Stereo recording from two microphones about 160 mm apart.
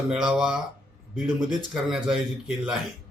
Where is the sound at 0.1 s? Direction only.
5° right (ahead or behind).